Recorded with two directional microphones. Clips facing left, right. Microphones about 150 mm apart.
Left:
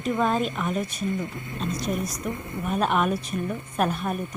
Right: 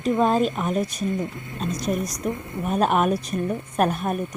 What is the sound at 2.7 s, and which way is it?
A woman's voice, 40° right (ahead or behind).